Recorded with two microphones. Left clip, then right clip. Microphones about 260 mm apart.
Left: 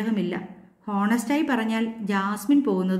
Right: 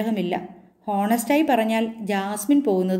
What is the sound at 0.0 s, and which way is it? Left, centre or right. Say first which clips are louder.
A woman's voice: right 3 dB; centre.